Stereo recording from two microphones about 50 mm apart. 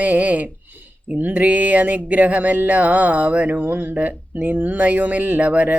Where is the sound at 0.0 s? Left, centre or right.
Right.